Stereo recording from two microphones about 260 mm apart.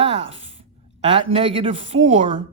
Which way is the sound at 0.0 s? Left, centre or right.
Right.